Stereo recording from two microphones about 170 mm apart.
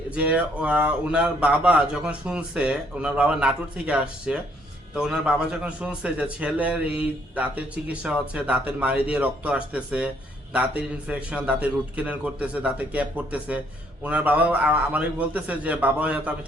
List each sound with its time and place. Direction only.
0.1 s a man's voice: 10° right (ahead or behind)